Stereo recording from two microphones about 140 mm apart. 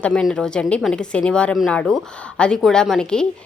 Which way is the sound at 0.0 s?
5° left (ahead or behind).